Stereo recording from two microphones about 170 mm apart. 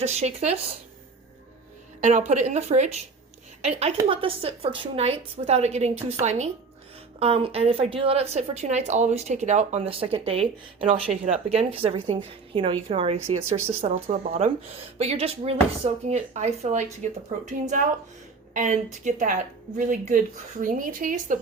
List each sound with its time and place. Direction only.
0.0 s a woman's voice: 40° right (ahead or behind)
2.0 s a woman's voice: 45° right (ahead or behind)